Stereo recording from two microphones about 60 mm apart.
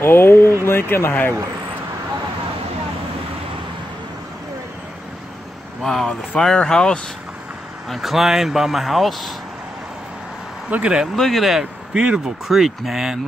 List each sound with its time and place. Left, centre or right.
0.0 s speech: left
5.8 s speech: centre
7.9 s speech: centre
10.7 s speech: centre
11.1 s speech: centre
11.9 s speech: centre
12.4 s speech: centre